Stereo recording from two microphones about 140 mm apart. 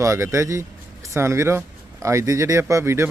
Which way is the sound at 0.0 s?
20° right (ahead or behind).